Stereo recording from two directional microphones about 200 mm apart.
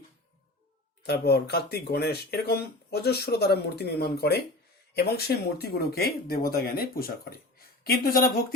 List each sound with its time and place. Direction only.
1.0 s speech: 50° left (ahead or behind)